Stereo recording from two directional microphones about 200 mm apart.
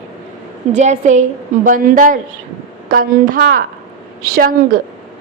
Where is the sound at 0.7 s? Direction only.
35° right (ahead or behind).